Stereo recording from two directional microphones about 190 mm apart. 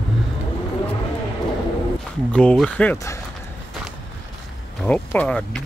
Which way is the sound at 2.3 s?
5° left (ahead or behind).